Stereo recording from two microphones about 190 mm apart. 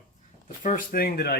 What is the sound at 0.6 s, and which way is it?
Speech, 45° left (ahead or behind).